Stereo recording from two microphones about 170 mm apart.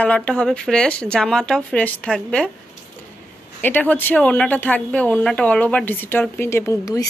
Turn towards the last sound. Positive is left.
turn(degrees=20)  # may be behind; listen again after turning